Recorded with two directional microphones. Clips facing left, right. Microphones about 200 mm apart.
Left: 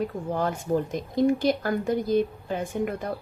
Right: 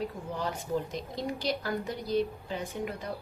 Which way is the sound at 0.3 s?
50° left (ahead or behind).